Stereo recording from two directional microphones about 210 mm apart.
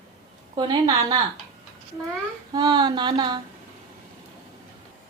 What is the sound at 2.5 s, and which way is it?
Speech, 20° right (ahead or behind).